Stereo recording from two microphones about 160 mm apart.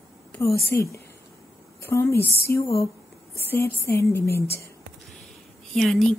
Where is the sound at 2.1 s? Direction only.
80° left.